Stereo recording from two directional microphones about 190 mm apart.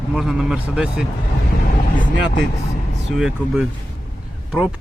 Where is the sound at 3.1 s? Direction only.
5° right (ahead or behind).